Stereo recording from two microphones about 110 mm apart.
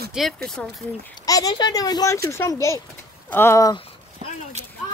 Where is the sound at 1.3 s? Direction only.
35° left (ahead or behind).